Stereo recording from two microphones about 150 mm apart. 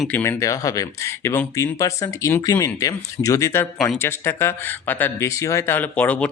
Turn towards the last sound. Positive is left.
turn(degrees=10)  # may be behind; listen again after turning